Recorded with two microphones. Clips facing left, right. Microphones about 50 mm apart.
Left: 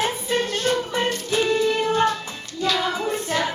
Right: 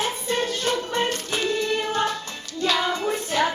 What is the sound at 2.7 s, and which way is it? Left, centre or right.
Child singing, centre.